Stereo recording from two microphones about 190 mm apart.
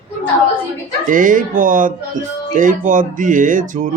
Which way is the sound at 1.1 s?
45° right (ahead or behind).